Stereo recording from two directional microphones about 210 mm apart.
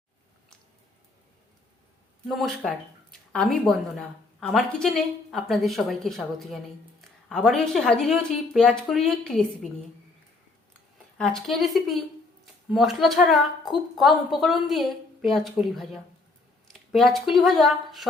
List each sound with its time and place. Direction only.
2.2 s speech: centre (ahead or behind)
11.2 s speech: centre (ahead or behind)